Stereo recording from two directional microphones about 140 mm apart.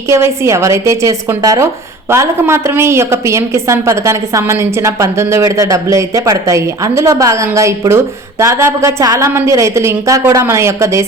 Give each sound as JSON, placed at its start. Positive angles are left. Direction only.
{"t": 0.1, "sound": "a woman's voice", "side_deg": -20}